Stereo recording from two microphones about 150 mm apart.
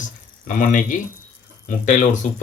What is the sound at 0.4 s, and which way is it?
Speech, 60° left (ahead or behind).